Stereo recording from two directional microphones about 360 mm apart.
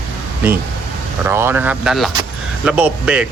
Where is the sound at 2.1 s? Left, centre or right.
Centre.